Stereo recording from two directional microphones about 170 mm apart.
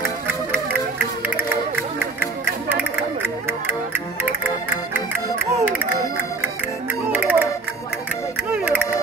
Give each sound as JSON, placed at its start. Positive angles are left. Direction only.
{"t": 0.0, "sound": "music", "side_deg": -15}
{"t": 7.1, "sound": "music", "side_deg": -10}